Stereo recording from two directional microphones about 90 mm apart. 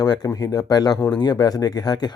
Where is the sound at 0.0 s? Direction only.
45° left (ahead or behind).